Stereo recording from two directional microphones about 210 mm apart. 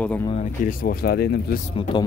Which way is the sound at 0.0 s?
5° left (ahead or behind).